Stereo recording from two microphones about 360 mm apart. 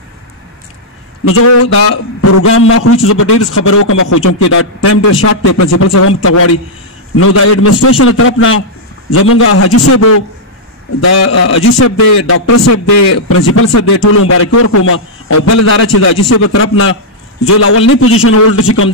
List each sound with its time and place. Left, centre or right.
1.2 s a man's voice: left